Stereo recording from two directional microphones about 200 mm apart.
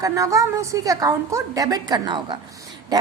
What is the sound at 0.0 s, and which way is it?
A woman's voice, 15° right (ahead or behind).